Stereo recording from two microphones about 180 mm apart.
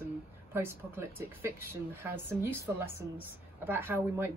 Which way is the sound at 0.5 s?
10° right (ahead or behind).